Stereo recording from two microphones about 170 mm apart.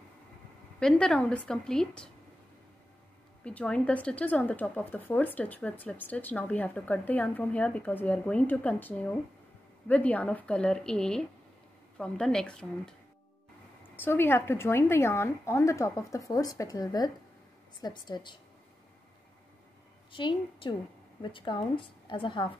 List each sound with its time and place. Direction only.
0.7 s a woman's voice: 5° left (ahead or behind)
3.4 s a woman's voice: 5° left (ahead or behind)
13.9 s a woman's voice: 10° left (ahead or behind)
20.1 s a woman's voice: 30° left (ahead or behind)